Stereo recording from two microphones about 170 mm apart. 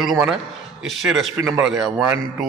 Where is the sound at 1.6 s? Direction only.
5° right (ahead or behind).